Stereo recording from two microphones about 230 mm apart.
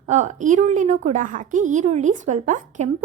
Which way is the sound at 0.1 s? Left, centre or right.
Right.